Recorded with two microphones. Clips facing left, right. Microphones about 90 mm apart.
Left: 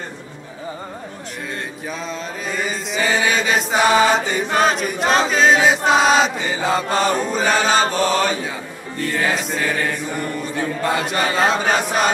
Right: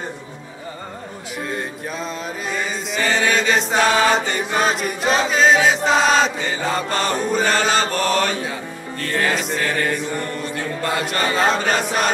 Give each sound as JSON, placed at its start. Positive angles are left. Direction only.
{"t": 1.5, "sound": "mantra", "side_deg": 0}
{"t": 4.6, "sound": "chant", "side_deg": 0}